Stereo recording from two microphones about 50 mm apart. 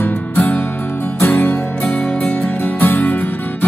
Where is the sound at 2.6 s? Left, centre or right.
Left.